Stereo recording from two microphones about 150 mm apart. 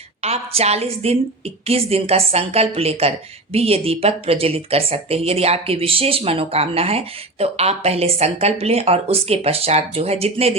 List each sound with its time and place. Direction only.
0.2 s a woman's voice: 45° right (ahead or behind)